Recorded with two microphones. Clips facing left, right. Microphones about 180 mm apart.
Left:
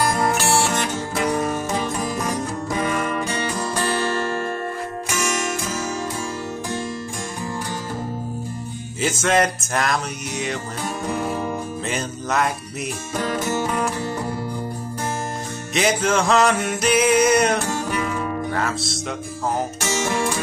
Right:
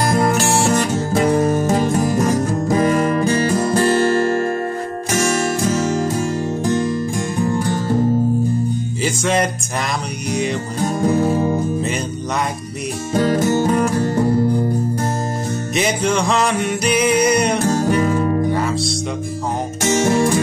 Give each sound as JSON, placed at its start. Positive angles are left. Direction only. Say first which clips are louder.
{"t": 0.0, "sound": "music", "louder": "right 4 dB", "side_deg": -40}
{"t": 5.2, "sound": "music", "louder": "right 7 dB", "side_deg": -35}
{"t": 9.0, "sound": "music", "louder": "even", "side_deg": 0}
{"t": 11.0, "sound": "music", "louder": "right 9 dB", "side_deg": -40}
{"t": 11.8, "sound": "music", "louder": "right 4 dB", "side_deg": 0}
{"t": 13.1, "sound": "music", "louder": "right 8 dB", "side_deg": -45}
{"t": 15.7, "sound": "music", "louder": "even", "side_deg": 0}
{"t": 17.6, "sound": "music", "louder": "right 8 dB", "side_deg": -40}
{"t": 18.5, "sound": "speech", "louder": "right 5 dB", "side_deg": 0}
{"t": 20.1, "sound": "music", "louder": "right 7 dB", "side_deg": -40}